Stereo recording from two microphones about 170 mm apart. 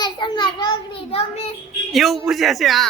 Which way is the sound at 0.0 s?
25° left (ahead or behind).